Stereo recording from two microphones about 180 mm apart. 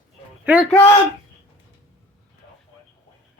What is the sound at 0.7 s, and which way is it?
Speech, 15° left (ahead or behind).